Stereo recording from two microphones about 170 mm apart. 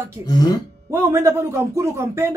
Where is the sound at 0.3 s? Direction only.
25° left (ahead or behind).